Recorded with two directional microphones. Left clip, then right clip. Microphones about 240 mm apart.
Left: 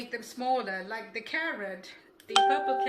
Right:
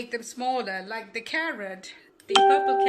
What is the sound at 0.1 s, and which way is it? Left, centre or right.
Speech, right.